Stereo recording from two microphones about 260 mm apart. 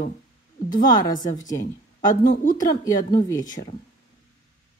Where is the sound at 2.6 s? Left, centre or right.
Centre.